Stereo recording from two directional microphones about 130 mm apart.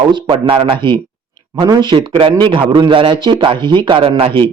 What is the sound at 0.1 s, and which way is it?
A man's voice, 35° right (ahead or behind).